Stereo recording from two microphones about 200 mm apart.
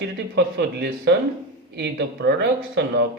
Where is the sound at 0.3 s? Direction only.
55° right (ahead or behind).